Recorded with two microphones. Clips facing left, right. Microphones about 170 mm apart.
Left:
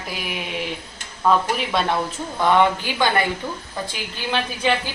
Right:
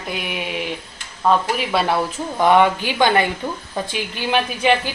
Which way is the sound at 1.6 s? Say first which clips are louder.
Right 2 dB; 5° right (ahead or behind).